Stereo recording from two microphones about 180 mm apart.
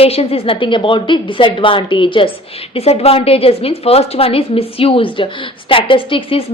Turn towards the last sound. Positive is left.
turn(degrees=30)  # may be behind; listen again after turning